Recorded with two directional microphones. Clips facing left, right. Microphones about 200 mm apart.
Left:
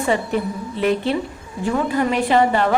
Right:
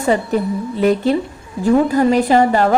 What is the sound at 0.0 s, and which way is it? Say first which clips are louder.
A woman's voice: right 4 dB; 40° right (ahead or behind).